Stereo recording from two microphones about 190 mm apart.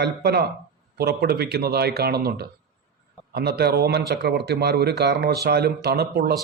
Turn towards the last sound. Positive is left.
turn(degrees=-55)  # may be behind; listen again after turning